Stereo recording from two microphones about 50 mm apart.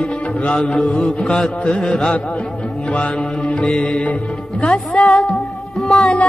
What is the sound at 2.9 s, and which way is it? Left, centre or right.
Mantra, left.